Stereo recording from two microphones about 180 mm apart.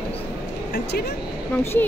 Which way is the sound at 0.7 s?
65° left (ahead or behind).